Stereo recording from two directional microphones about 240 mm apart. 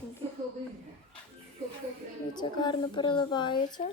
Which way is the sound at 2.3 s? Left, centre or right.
Centre.